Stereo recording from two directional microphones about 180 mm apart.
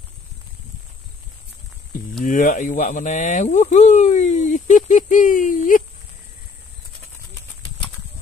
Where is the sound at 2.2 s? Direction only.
45° left (ahead or behind).